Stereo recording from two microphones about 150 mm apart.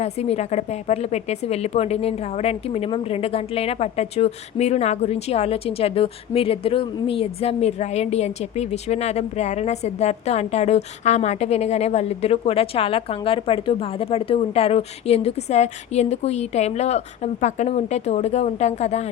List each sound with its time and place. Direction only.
0.0 s a woman's voice: 45° left (ahead or behind)